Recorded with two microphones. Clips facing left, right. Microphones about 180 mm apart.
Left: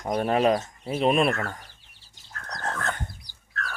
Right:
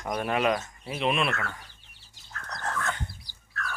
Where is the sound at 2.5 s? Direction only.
40° left (ahead or behind).